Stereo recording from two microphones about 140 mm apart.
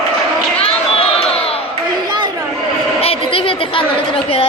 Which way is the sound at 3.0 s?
45° left (ahead or behind).